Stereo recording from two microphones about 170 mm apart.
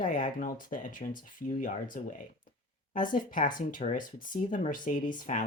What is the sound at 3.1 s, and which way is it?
Speech, 50° left (ahead or behind).